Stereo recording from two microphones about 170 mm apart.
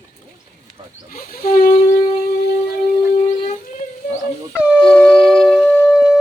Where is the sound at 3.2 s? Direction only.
40° left (ahead or behind).